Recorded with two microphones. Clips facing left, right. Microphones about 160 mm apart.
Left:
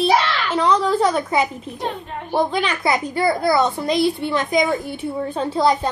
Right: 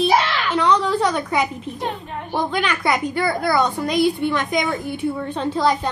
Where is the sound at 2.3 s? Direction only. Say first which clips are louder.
Left 2 dB; 35° left (ahead or behind).